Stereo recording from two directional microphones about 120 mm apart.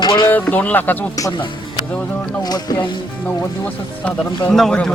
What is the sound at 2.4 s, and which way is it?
Speech, 35° left (ahead or behind).